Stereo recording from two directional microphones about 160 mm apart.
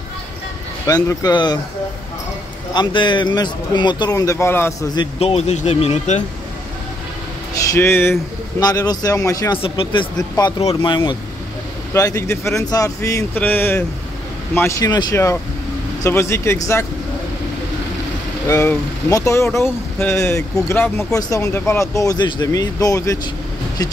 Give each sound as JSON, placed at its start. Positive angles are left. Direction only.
{"t": 0.8, "sound": "a man's voice", "side_deg": 20}
{"t": 2.7, "sound": "a man's voice", "side_deg": 30}
{"t": 5.2, "sound": "speech", "side_deg": 40}
{"t": 7.7, "sound": "a man's voice", "side_deg": 15}
{"t": 9.6, "sound": "a man's voice", "side_deg": 35}
{"t": 11.9, "sound": "a man's voice", "side_deg": 20}
{"t": 18.5, "sound": "a man's voice", "side_deg": 20}